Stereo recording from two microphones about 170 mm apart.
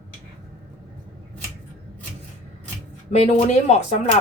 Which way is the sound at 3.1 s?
40° left (ahead or behind).